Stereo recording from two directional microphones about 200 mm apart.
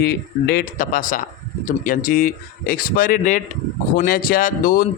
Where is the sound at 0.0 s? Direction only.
55° left (ahead or behind).